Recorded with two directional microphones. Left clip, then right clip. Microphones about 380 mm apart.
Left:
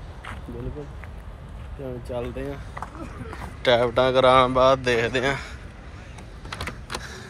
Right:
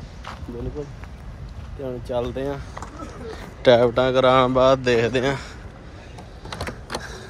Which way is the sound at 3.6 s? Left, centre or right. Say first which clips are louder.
Right 3 dB; centre.